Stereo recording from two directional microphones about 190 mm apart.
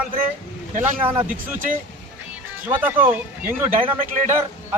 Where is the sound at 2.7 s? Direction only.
10° right (ahead or behind).